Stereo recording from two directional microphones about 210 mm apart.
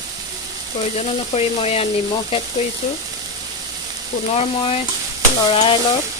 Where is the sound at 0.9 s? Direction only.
30° left (ahead or behind).